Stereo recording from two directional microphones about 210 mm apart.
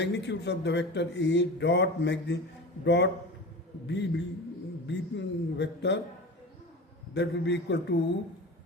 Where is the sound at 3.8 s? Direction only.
55° left (ahead or behind).